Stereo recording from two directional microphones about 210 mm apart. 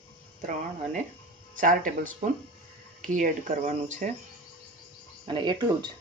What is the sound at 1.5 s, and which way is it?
Speech, 40° right (ahead or behind).